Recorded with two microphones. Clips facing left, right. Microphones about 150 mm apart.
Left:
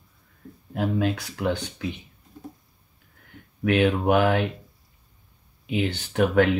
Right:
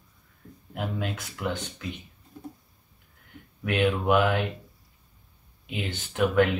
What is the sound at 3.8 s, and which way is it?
Speech, 45° left (ahead or behind).